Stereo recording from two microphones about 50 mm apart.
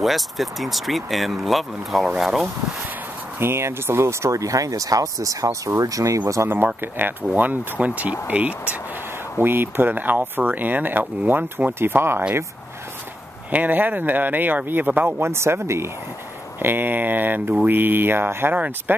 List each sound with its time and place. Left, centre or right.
0.0 s speech: centre
3.3 s speech: right
6.5 s speech: right
9.4 s speech: right
13.5 s speech: right
15.0 s speech: right
16.6 s speech: right